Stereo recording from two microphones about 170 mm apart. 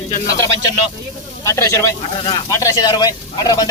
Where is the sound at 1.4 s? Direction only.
15° left (ahead or behind).